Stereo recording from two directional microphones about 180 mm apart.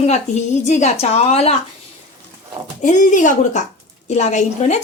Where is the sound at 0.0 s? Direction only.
40° left (ahead or behind).